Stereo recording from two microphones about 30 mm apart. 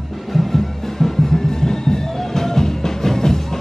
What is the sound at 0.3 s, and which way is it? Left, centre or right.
Music, centre.